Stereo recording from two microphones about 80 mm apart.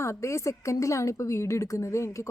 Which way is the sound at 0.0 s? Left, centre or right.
Left.